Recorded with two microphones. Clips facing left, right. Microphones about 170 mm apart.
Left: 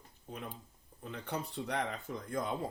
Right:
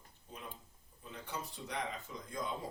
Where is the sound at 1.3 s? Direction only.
60° left (ahead or behind).